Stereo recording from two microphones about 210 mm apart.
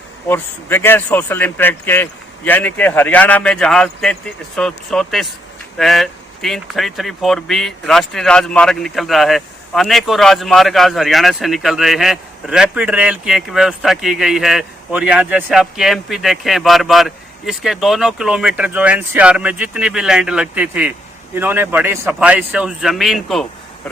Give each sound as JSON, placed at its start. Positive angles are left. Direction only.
{"t": 0.3, "sound": "a man's voice", "side_deg": 10}